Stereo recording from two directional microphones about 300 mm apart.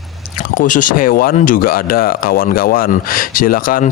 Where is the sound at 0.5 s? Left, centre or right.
Left.